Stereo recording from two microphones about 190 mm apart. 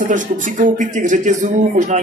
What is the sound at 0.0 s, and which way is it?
Speech, 40° right (ahead or behind).